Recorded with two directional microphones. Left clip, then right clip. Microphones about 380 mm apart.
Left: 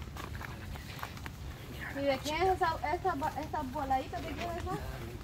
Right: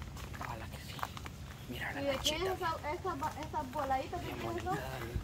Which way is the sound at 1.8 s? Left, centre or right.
Right.